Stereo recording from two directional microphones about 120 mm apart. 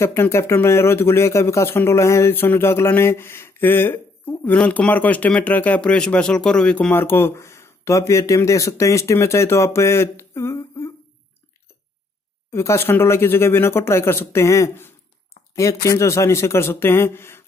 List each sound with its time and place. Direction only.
0.0 s speech: 20° left (ahead or behind)
12.4 s speech: 20° left (ahead or behind)